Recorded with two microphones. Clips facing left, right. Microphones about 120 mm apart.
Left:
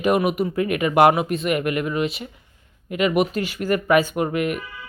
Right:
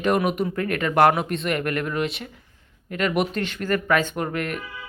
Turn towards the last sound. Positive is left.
turn(degrees=10)  # may be behind; listen again after turning